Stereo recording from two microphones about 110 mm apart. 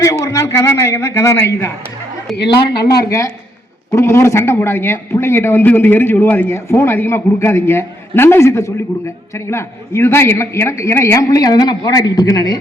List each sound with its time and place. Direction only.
0.0 s a man's voice: 30° left (ahead or behind)
2.8 s a man's voice: 30° left (ahead or behind)